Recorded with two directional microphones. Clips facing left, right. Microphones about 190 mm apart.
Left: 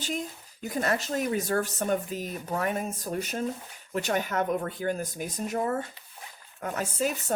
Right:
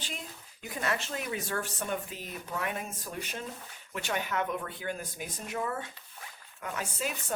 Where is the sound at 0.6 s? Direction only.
40° left (ahead or behind).